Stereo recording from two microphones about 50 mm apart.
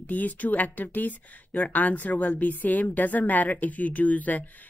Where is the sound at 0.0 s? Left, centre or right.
Left.